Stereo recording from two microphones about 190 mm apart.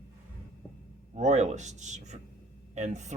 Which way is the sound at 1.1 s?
35° right (ahead or behind).